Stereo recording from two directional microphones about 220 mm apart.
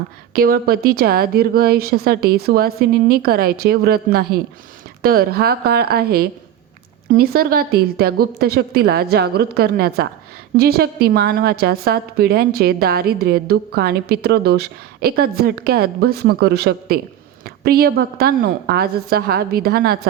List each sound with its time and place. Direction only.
0.3 s a woman's voice: 40° right (ahead or behind)